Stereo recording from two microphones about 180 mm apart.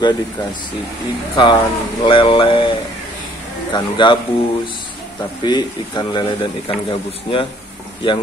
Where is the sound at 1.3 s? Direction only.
25° left (ahead or behind).